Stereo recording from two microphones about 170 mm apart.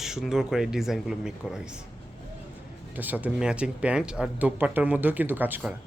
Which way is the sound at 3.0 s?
10° right (ahead or behind).